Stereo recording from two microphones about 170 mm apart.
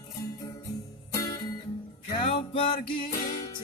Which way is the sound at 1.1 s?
20° left (ahead or behind).